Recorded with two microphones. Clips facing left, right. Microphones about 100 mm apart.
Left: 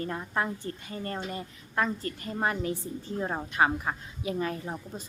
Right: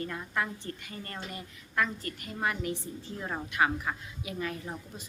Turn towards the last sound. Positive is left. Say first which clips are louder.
# left 4 dB
turn(degrees=30)  # may be behind; listen again after turning